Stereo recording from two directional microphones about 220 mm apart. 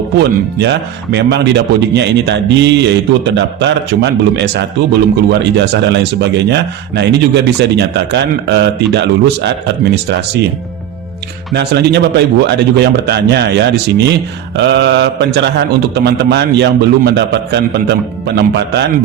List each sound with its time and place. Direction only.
0.2 s speech: 50° right (ahead or behind)
11.5 s speech: 50° right (ahead or behind)